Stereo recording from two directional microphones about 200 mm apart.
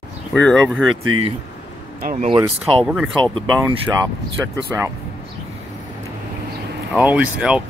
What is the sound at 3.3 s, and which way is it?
Speech, 20° right (ahead or behind).